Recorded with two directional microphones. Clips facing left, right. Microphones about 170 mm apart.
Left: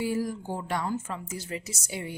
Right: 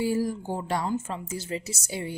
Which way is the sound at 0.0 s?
30° right (ahead or behind).